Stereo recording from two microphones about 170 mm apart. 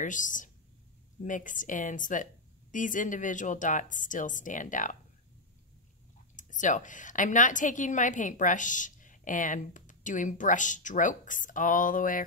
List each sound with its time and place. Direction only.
0.0 s a woman's voice: 50° left (ahead or behind)
6.3 s a woman's voice: 50° left (ahead or behind)